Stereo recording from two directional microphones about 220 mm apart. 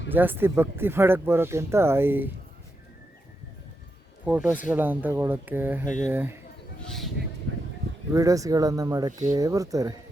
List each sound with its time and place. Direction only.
0.1 s speech: 10° right (ahead or behind)
4.3 s speech: 5° right (ahead or behind)
6.8 s speech: centre (ahead or behind)
8.1 s speech: 15° right (ahead or behind)